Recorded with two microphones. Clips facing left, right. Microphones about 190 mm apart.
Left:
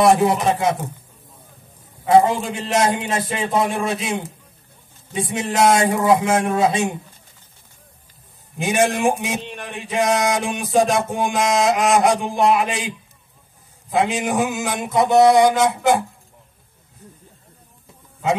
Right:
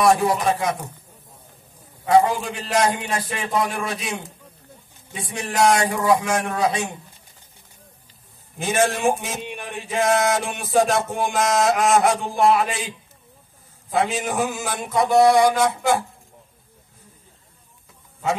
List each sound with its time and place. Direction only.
0.0 s a man's voice: 25° left (ahead or behind)
2.0 s a man's voice: 25° left (ahead or behind)
8.5 s mantra: 15° left (ahead or behind)
9.4 s a sound: 10° right (ahead or behind)
9.8 s mantra: 15° left (ahead or behind)